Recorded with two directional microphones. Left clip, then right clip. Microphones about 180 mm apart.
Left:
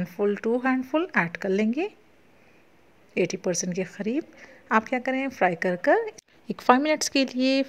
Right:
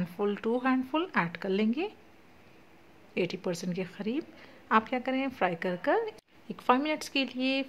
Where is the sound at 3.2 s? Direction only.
25° left (ahead or behind).